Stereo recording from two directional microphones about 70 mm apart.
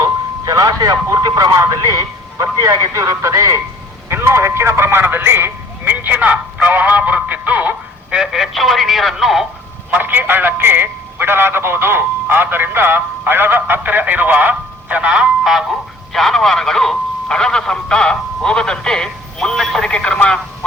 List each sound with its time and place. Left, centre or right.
0.0 s a sound: right
1.1 s a man's voice: right
8.2 s speech: centre
9.9 s speech: right
15.7 s speech: centre